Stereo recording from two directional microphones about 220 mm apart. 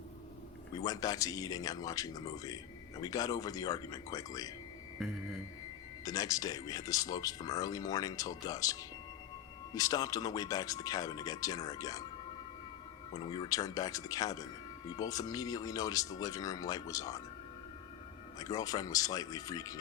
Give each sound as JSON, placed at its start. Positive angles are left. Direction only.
{"t": 0.9, "sound": "speech", "side_deg": 15}
{"t": 6.1, "sound": "speech", "side_deg": 15}
{"t": 13.1, "sound": "speech", "side_deg": 20}
{"t": 18.3, "sound": "speech", "side_deg": 15}